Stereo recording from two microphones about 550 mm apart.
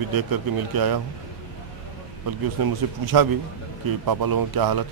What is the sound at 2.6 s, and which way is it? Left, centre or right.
Speech, right.